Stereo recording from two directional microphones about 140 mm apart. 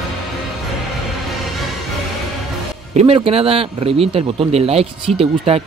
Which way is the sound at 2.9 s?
50° right (ahead or behind).